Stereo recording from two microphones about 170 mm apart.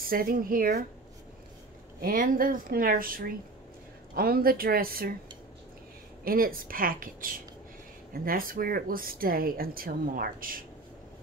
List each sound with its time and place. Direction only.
0.0 s speech: 60° right (ahead or behind)
2.0 s speech: 55° right (ahead or behind)
6.2 s speech: 60° right (ahead or behind)